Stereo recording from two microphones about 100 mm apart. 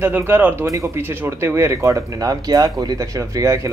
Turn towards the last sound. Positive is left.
turn(degrees=-30)  # may be behind; listen again after turning